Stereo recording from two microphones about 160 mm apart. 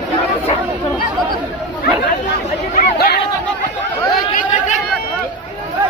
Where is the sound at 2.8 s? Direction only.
75° left (ahead or behind).